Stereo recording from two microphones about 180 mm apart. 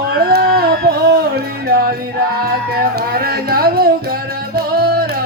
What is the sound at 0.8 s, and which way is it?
Music, 60° right (ahead or behind).